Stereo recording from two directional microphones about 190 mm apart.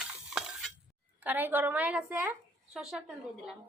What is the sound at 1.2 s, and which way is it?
A woman's voice, 10° right (ahead or behind).